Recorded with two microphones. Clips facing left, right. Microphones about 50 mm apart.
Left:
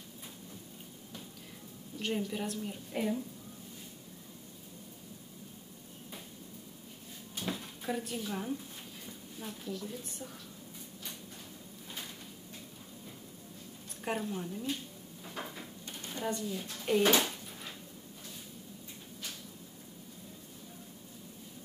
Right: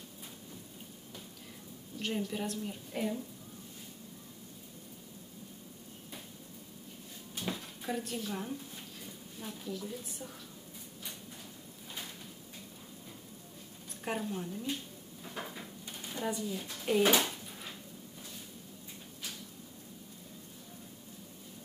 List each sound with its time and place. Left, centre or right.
2.0 s a woman's voice: centre
7.3 s drawer open or close: centre
9.0 s a woman's voice: centre
14.0 s a woman's voice: centre
15.2 s a sound: centre